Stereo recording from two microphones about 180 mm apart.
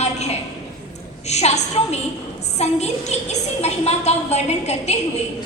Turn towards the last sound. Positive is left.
turn(degrees=40)  # may be behind; listen again after turning